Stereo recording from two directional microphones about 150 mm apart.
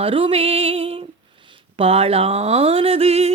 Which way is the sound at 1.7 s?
40° right (ahead or behind).